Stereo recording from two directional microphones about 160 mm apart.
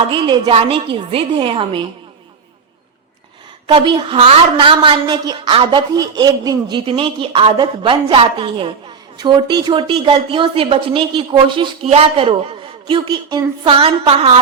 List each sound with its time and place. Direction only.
0.1 s a woman's voice: 30° right (ahead or behind)
3.7 s a woman's voice: 30° right (ahead or behind)